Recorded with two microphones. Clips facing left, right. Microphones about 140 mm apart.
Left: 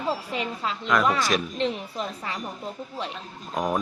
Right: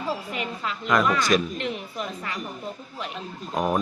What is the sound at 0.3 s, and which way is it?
Speech, 25° left (ahead or behind).